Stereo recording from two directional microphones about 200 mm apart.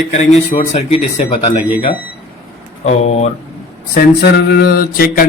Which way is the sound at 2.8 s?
35° left (ahead or behind).